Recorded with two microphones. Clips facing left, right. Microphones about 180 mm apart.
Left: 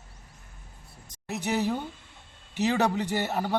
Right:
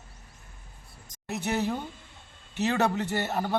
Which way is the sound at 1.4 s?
15° left (ahead or behind).